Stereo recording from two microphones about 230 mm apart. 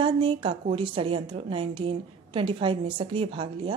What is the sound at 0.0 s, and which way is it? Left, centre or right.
A woman's voice, right.